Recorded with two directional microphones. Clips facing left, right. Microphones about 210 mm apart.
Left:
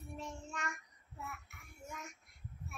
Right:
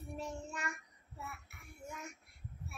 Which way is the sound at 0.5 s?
5° right (ahead or behind).